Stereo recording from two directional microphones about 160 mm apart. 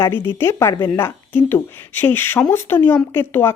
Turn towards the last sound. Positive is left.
turn(degrees=15)  # may be behind; listen again after turning